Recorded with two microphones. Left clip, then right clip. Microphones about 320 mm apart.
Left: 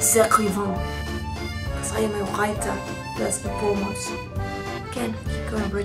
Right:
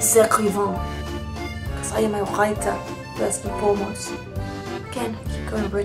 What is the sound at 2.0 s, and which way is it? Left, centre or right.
Speech, centre.